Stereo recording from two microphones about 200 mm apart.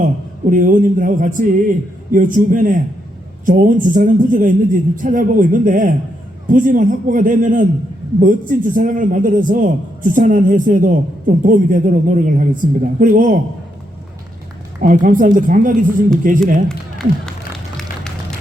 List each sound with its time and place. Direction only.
0.5 s a man's voice: 45° right (ahead or behind)
14.8 s a man's voice: 45° right (ahead or behind)